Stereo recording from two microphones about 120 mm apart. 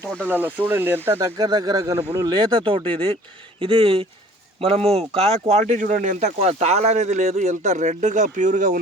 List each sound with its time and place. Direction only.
0.1 s speech: 10° left (ahead or behind)
0.3 s speech: 15° right (ahead or behind)
1.2 s speech: 30° right (ahead or behind); by 8.7 s 90° right